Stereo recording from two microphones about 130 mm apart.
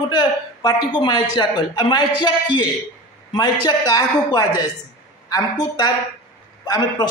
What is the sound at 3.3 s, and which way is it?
A man's voice, 30° left (ahead or behind).